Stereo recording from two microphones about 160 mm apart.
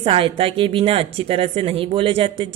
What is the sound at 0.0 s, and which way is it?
Speech, 35° right (ahead or behind).